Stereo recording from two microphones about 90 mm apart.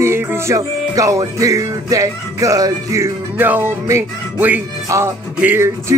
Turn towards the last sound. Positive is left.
turn(degrees=-20)  # may be behind; listen again after turning